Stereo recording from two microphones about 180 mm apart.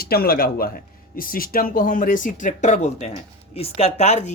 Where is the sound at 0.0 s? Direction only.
55° left (ahead or behind).